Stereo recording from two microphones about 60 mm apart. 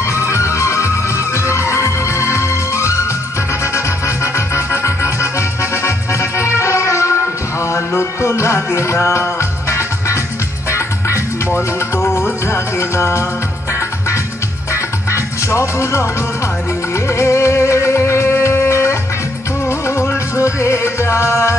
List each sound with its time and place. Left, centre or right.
0.1 s music: left
11.5 s music: left
14.7 s music: left
17.1 s music: left
20.3 s music: left